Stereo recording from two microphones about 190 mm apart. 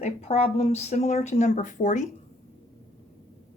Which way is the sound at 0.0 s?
35° left (ahead or behind).